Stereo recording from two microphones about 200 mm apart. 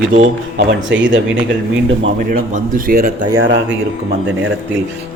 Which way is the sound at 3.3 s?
70° right (ahead or behind).